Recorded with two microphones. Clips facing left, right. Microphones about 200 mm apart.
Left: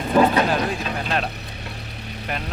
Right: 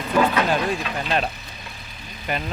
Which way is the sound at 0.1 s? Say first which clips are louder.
Left 3 dB; 30° left (ahead or behind).